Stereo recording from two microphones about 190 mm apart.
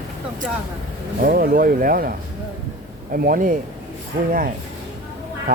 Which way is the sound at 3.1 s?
50° right (ahead or behind).